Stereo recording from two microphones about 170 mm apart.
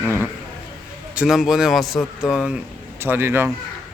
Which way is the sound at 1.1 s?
Centre (ahead or behind).